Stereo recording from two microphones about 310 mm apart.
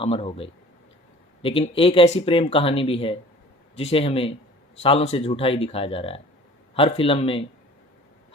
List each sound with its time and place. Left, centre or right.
0.0 s speech: centre